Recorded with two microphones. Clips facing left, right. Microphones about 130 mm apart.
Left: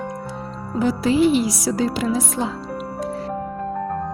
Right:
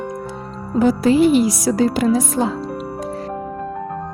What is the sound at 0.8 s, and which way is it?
Speech, 50° right (ahead or behind).